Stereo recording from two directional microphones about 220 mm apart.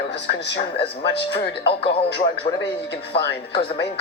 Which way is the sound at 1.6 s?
25° left (ahead or behind).